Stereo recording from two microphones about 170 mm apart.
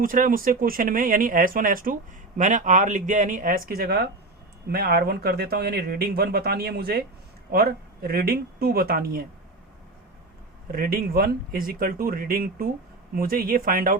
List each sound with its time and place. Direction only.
0.0 s speech: 55° right (ahead or behind)
10.7 s speech: 60° right (ahead or behind)